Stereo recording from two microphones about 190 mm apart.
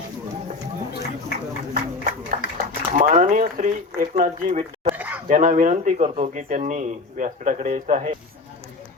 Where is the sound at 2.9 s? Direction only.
40° right (ahead or behind).